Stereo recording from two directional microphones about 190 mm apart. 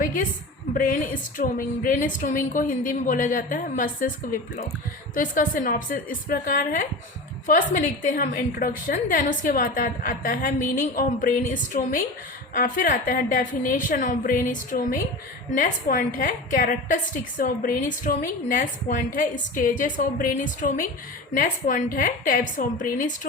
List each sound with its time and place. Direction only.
0.0 s a woman's voice: 45° left (ahead or behind)
5.1 s a woman's voice: 45° left (ahead or behind)